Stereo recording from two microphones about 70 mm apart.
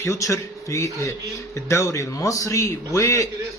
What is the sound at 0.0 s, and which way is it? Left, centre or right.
Speech, left.